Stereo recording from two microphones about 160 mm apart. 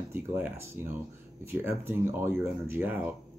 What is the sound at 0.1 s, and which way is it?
Speech, 15° right (ahead or behind).